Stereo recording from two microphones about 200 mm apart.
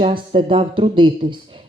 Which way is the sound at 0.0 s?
25° right (ahead or behind).